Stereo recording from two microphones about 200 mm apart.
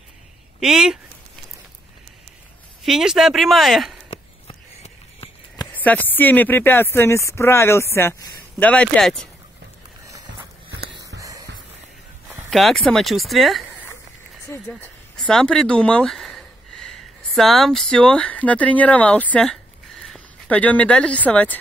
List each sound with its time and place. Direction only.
0.6 s speech: 5° right (ahead or behind)
2.8 s speech: centre (ahead or behind)
4.1 s a sound: 30° left (ahead or behind)
5.8 s speech: 10° left (ahead or behind)
11.1 s music: 15° right (ahead or behind)
12.4 s speech: centre (ahead or behind)